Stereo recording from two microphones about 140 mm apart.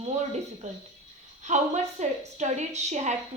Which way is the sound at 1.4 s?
55° right (ahead or behind).